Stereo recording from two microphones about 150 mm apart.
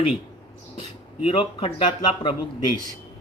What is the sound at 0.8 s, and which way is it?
Speech, 35° left (ahead or behind).